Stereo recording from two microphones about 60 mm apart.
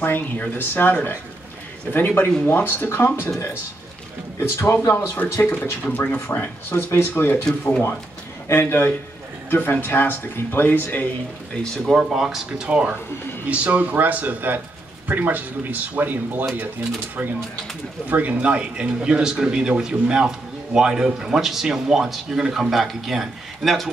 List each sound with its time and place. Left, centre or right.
0.0 s speech: left
4.4 s speech: left
5.4 s speech: left
7.4 s speech: centre
8.5 s speech: left
11.5 s speech: centre
11.9 s speech: centre
12.6 s speech: right
18.0 s speech: right; by 23.9 s centre